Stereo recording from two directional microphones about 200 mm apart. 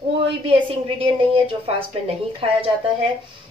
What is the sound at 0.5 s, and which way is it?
A woman's voice, 25° right (ahead or behind).